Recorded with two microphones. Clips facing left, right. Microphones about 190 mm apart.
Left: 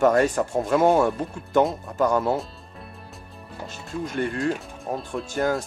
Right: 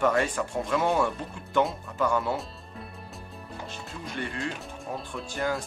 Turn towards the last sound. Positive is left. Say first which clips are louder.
# left 6 dB
turn(degrees=45)  # may be behind; listen again after turning